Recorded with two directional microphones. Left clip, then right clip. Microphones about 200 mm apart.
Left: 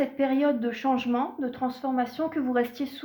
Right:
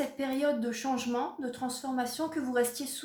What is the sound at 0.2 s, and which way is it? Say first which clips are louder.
Speech: left 5 dB; 40° left (ahead or behind).